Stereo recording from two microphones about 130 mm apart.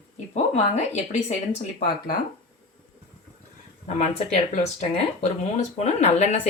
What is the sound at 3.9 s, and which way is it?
Speech, 60° left (ahead or behind).